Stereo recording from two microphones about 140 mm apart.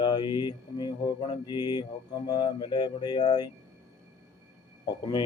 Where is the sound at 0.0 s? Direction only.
35° left (ahead or behind).